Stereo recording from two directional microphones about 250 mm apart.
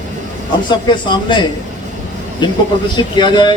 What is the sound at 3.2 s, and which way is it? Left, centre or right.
Speech, centre.